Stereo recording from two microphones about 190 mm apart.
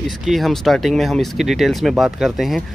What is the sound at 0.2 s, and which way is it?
Speech, centre (ahead or behind).